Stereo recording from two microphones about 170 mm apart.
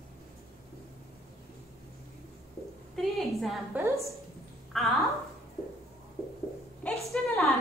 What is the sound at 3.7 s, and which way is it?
Speech, 15° right (ahead or behind).